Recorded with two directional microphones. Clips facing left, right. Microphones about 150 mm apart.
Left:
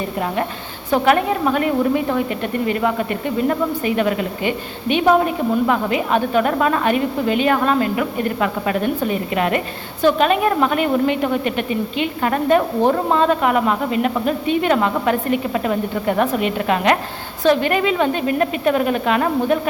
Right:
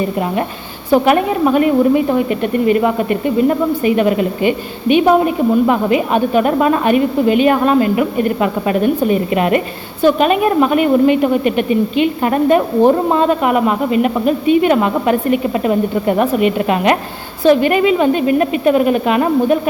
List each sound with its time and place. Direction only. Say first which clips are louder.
0.9 s speech: right 4 dB; 10° right (ahead or behind)